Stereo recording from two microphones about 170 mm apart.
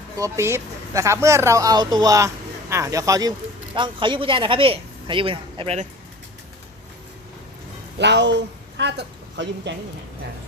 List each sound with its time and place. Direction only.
0.2 s speech: 15° right (ahead or behind); by 5.9 s 40° right (ahead or behind)
7.9 s speech: 90° right